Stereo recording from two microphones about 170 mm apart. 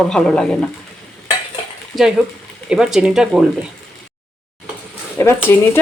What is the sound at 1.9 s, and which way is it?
Speech, centre (ahead or behind).